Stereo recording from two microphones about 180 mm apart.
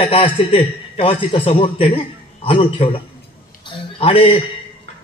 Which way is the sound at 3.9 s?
30° left (ahead or behind).